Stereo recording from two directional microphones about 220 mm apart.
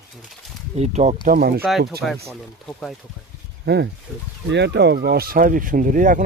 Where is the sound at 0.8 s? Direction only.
30° right (ahead or behind).